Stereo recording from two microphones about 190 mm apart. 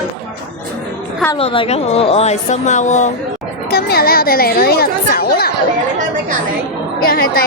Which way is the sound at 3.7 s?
55° left (ahead or behind).